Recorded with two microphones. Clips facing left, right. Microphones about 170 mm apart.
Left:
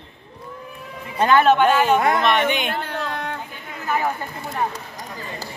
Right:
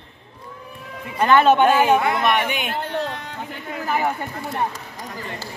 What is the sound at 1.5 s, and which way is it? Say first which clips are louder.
Speech: right 1 dB; 15° right (ahead or behind).